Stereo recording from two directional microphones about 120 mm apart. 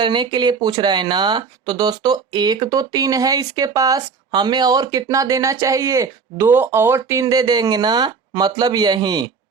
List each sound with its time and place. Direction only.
0.0 s speech: 40° right (ahead or behind)